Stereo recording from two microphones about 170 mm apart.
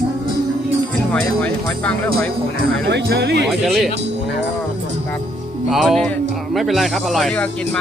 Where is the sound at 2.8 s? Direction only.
80° right.